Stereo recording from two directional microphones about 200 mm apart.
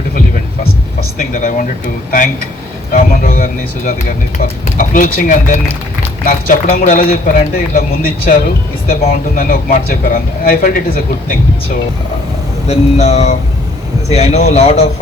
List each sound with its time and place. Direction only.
1.2 s a man's voice: 45° left (ahead or behind)
12.6 s speech: 30° left (ahead or behind)